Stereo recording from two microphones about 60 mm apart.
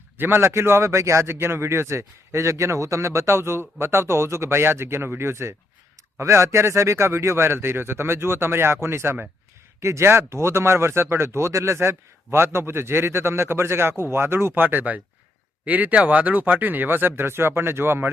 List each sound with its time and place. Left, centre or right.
0.2 s speech: right